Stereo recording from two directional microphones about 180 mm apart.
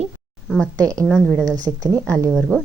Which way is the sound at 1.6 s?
20° right (ahead or behind).